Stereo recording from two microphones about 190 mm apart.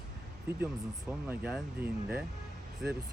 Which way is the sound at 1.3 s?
5° right (ahead or behind).